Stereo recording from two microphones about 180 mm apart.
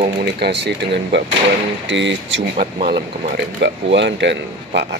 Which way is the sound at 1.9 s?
90° right.